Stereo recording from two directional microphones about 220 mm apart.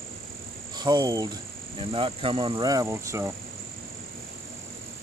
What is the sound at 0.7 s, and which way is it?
Speech, 20° right (ahead or behind).